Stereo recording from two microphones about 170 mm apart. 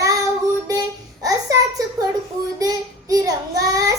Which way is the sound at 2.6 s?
20° right (ahead or behind).